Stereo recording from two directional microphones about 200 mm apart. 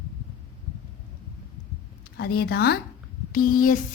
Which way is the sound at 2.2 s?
50° left (ahead or behind).